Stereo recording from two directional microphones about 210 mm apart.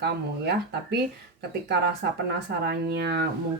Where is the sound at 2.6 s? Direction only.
50° right (ahead or behind).